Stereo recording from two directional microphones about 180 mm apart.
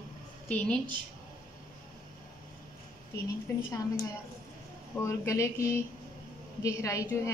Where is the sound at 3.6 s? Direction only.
20° left (ahead or behind).